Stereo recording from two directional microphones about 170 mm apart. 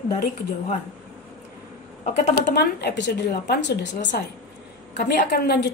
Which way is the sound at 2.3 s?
75° left (ahead or behind).